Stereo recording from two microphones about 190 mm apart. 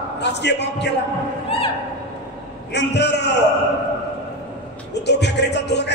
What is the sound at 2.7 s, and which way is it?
Speech, 65° left (ahead or behind).